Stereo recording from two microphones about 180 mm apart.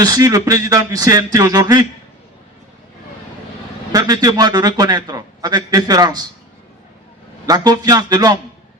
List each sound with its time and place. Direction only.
0.0 s a man's voice: 20° right (ahead or behind)
3.9 s a man's voice: 20° right (ahead or behind)
7.4 s a man's voice: 20° right (ahead or behind)